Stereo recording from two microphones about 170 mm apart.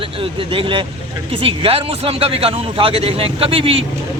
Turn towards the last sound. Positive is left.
turn(degrees=-35)  # may be behind; listen again after turning